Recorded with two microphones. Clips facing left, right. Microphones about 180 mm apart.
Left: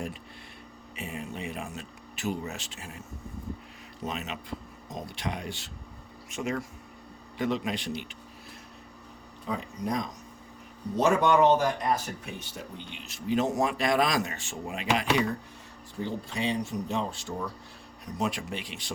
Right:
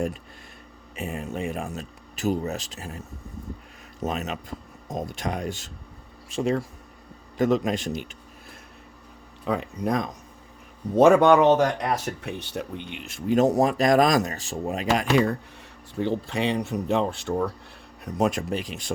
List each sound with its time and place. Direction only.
0.9 s speech: 45° right (ahead or behind)
4.0 s speech: 45° right (ahead or behind)
6.3 s speech: 30° right (ahead or behind)
7.3 s speech: 45° right (ahead or behind)
9.4 s speech: 70° right (ahead or behind); by 15.3 s 40° right (ahead or behind)
16.0 s speech: 65° right (ahead or behind)
18.0 s speech: 50° right (ahead or behind)